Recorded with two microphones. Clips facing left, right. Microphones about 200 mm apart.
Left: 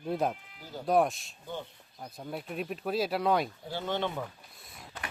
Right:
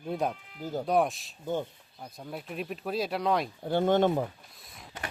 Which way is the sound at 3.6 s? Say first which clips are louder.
Right 9 dB; 55° right (ahead or behind).